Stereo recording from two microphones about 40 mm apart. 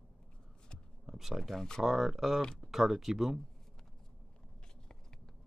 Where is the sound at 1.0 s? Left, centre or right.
Centre.